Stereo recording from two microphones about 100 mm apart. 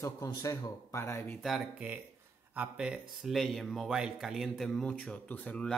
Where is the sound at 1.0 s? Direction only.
25° left (ahead or behind).